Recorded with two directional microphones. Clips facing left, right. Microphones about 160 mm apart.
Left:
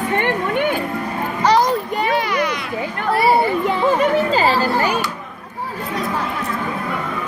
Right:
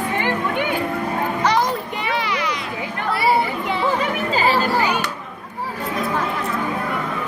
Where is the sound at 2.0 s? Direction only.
45° left (ahead or behind).